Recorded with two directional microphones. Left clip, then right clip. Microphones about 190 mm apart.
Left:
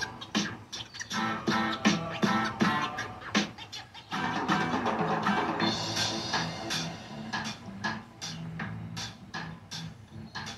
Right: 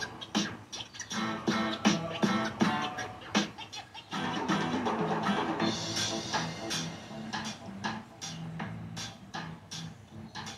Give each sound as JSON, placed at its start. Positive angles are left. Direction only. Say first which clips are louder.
{"t": 0.0, "sound": "music", "louder": "left 1 dB", "side_deg": 20}